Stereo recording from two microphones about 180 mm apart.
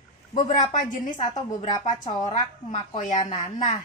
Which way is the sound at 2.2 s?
40° left (ahead or behind).